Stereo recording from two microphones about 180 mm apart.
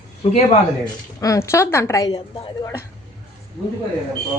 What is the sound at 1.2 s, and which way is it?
A woman's voice, 15° left (ahead or behind).